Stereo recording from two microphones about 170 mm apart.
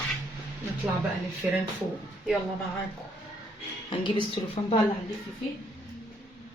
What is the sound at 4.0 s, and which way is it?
Speech, 30° left (ahead or behind).